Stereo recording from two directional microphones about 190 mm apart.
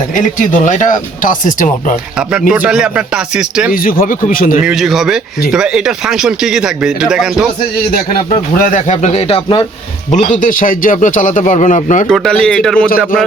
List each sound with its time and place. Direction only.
0.3 s speech: 40° left (ahead or behind)
2.5 s speech: 5° right (ahead or behind)
3.7 s speech: 50° left (ahead or behind)
4.6 s speech: centre (ahead or behind)
7.9 s speech: 50° left (ahead or behind); by 9.6 s 25° left (ahead or behind)
10.4 s speech: 45° left (ahead or behind)
12.0 s speech: 5° left (ahead or behind)